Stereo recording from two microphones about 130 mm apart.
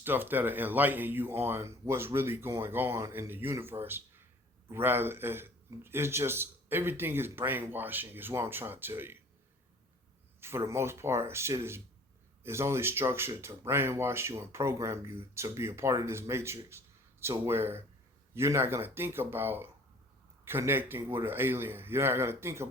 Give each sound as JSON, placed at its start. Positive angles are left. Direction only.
{"t": 0.0, "sound": "a man's voice", "side_deg": -15}
{"t": 10.4, "sound": "a man's voice", "side_deg": -20}